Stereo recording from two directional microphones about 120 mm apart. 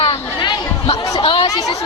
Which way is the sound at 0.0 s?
45° left (ahead or behind).